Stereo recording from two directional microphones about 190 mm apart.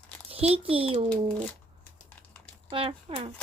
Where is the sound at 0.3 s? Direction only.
30° right (ahead or behind).